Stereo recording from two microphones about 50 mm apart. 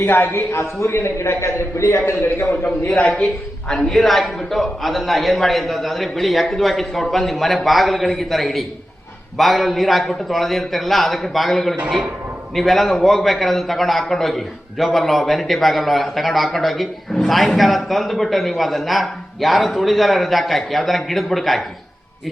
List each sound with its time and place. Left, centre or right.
0.0 s a man's voice: left
2.6 s a man's voice: centre